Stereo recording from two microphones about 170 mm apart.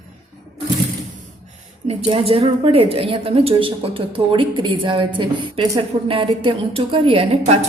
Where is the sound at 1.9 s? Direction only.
35° right (ahead or behind).